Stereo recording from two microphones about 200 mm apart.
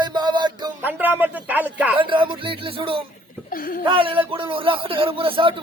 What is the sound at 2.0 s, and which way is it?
A man's voice, 25° right (ahead or behind).